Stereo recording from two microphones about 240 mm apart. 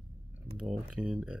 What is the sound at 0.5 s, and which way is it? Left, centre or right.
Speech, centre.